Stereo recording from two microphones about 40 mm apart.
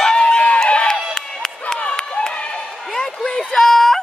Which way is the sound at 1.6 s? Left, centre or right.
Left.